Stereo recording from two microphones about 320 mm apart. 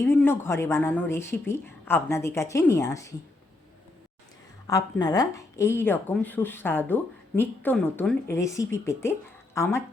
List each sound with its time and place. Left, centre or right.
0.0 s speech: centre
4.6 s speech: centre